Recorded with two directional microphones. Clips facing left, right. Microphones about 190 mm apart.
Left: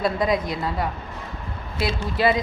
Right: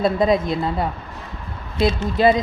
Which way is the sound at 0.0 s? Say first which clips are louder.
Right 4 dB; 25° right (ahead or behind).